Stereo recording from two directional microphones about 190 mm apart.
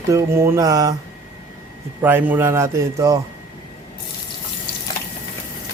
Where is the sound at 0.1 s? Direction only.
15° right (ahead or behind).